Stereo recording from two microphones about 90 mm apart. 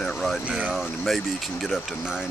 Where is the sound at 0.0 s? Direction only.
Centre (ahead or behind).